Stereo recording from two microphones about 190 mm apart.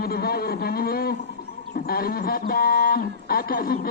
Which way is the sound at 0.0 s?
55° left (ahead or behind).